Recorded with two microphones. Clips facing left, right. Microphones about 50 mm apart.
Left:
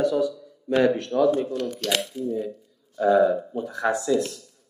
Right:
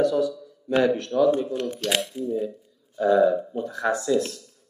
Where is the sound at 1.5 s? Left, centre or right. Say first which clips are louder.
Even; right.